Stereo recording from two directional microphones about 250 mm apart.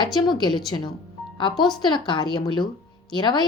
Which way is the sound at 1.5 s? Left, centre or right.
Centre.